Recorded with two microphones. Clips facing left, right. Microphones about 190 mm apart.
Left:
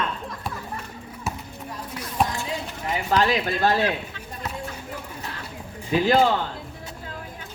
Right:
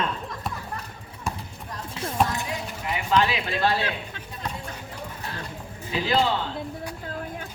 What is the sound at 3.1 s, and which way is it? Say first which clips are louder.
Speech: left 2 dB; 40° left (ahead or behind).